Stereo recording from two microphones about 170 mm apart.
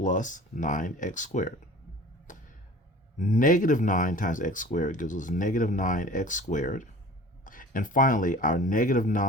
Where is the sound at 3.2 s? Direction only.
50° left (ahead or behind).